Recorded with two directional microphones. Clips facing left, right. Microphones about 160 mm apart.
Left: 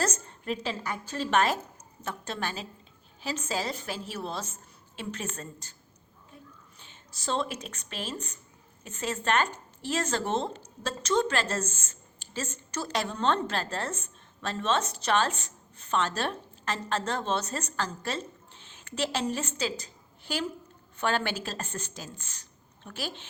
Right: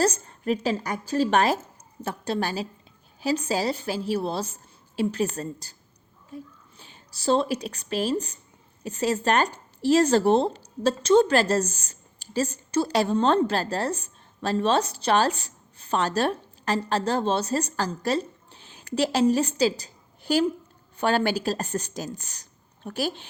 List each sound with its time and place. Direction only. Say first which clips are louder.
0.0 s a woman's voice: right 7 dB; 35° right (ahead or behind)